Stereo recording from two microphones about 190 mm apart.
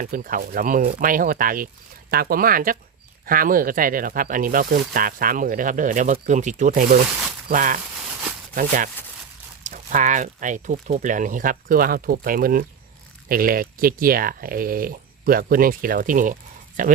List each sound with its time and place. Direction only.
0.0 s speech: 45° right (ahead or behind)